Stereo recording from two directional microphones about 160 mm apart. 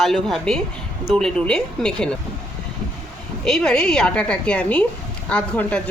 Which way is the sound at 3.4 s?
5° left (ahead or behind).